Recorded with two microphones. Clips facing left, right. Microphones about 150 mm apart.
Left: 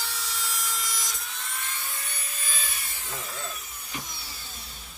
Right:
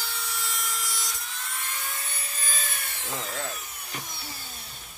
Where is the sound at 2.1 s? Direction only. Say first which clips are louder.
Right 2 dB; 40° right (ahead or behind).